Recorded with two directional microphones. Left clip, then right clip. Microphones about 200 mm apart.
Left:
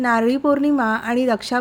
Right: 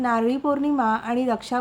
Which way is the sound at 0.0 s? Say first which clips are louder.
Left 4 dB; 15° left (ahead or behind).